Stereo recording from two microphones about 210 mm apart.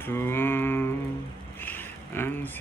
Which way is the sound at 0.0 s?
10° left (ahead or behind).